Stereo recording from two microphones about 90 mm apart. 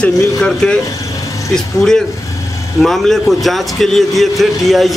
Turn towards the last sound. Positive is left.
turn(degrees=0)  # may be behind; listen again after turning